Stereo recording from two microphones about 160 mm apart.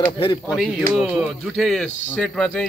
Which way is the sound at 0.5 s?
5° right (ahead or behind).